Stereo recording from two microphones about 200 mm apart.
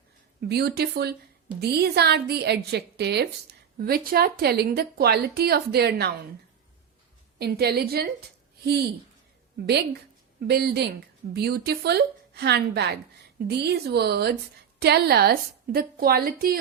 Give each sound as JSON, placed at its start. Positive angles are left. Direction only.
{"t": 0.4, "sound": "a woman's voice", "side_deg": -55}
{"t": 7.3, "sound": "a woman's voice", "side_deg": -55}
{"t": 10.4, "sound": "a woman's voice", "side_deg": -55}